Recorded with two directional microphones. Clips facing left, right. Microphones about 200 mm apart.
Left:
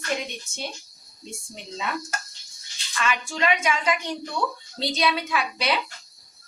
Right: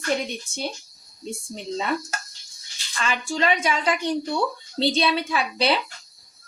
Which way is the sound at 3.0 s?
35° right (ahead or behind).